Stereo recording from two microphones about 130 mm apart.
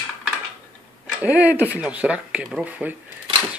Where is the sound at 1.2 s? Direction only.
10° right (ahead or behind).